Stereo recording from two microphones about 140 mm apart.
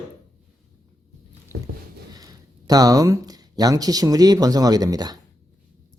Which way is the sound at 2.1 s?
25° right (ahead or behind).